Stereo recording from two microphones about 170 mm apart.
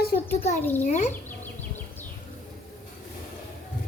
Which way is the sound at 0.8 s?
45° left (ahead or behind).